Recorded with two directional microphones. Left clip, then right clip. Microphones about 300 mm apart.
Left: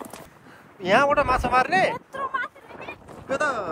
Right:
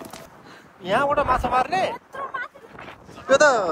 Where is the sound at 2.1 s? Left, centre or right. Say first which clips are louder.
Left 2 dB; left.